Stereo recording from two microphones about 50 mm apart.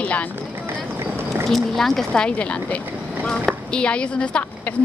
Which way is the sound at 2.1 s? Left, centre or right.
Left.